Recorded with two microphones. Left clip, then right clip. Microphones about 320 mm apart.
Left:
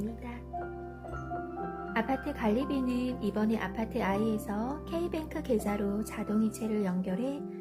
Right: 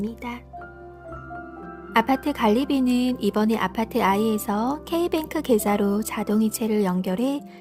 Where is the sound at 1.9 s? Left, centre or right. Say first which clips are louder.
Right 12 dB; right.